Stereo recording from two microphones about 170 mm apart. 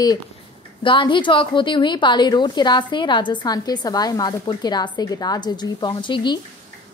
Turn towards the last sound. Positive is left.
turn(degrees=30)  # may be behind; listen again after turning